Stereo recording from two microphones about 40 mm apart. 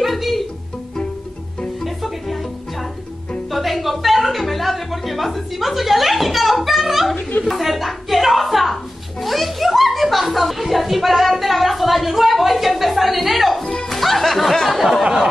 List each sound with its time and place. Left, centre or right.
0.0 s music: centre
2.0 s music: centre
3.5 s music: centre
7.2 s a sound: left
7.4 s a sound: centre
13.7 s music: centre